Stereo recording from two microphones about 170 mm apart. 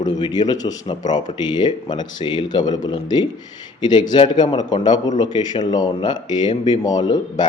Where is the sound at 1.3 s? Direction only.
25° left (ahead or behind).